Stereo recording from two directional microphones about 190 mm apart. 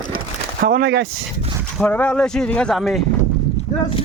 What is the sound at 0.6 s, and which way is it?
Speech, 50° right (ahead or behind).